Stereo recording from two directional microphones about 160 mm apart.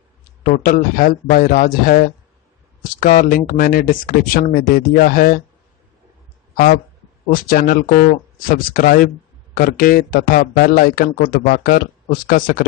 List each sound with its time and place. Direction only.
0.4 s speech: 60° left (ahead or behind)
6.5 s speech: 65° left (ahead or behind)